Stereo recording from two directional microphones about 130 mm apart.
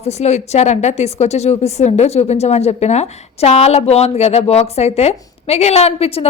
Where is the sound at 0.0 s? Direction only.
55° left (ahead or behind).